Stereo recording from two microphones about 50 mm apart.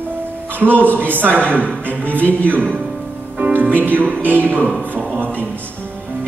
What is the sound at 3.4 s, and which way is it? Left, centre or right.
Speech, right.